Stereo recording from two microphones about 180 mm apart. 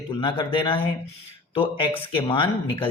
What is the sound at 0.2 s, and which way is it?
Speech, 30° left (ahead or behind).